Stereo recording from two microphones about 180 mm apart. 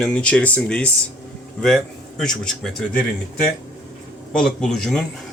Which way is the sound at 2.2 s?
Centre (ahead or behind).